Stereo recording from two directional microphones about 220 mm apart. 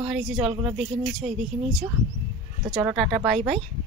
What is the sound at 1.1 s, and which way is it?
Speech, centre (ahead or behind).